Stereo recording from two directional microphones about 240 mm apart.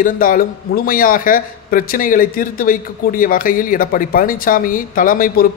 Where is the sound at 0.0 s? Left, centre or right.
Left.